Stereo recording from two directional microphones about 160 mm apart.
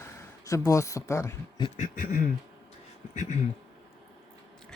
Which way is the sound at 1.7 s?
55° left (ahead or behind).